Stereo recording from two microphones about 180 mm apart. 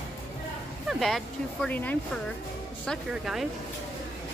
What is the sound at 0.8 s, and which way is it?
Speech, centre (ahead or behind).